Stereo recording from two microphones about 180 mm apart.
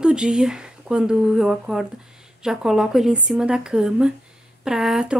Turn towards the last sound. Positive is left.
turn(degrees=-5)  # may be behind; listen again after turning